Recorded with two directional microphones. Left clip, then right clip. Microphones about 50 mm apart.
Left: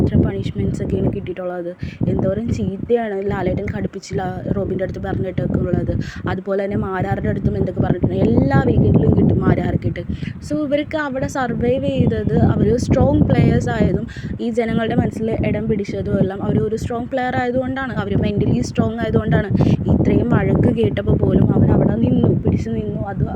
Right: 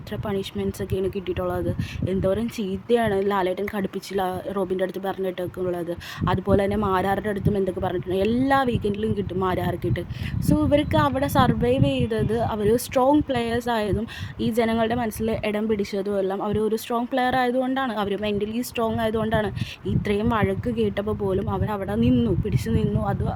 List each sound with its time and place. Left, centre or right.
0.0 s speech: right
2.0 s speech: right
9.1 s speech: right
10.5 s speech: right
12.5 s speech: right
13.2 s speech: centre
16.5 s speech: right
20.6 s speech: centre
21.3 s speech: right
21.8 s speech: right